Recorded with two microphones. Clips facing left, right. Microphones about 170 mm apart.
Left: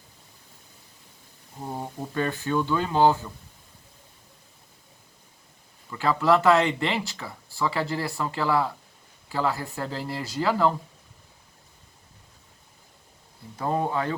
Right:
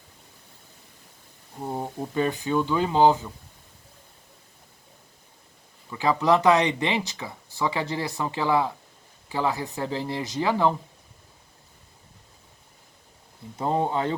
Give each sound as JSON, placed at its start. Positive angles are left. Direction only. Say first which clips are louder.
{"t": 1.6, "sound": "speech", "louder": "right 3 dB", "side_deg": -15}
{"t": 5.9, "sound": "speech", "louder": "even", "side_deg": -15}
{"t": 13.6, "sound": "speech", "louder": "right 1 dB", "side_deg": -20}